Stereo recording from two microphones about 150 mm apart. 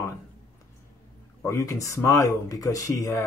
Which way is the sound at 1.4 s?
20° left (ahead or behind).